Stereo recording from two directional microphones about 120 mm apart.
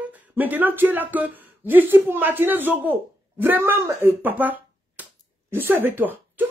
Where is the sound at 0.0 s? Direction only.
15° right (ahead or behind).